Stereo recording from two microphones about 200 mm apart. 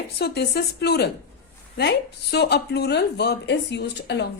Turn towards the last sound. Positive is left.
turn(degrees=60)  # may be behind; listen again after turning